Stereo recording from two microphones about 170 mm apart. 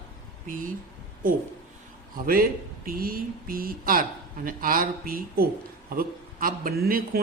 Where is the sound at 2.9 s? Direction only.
60° right (ahead or behind).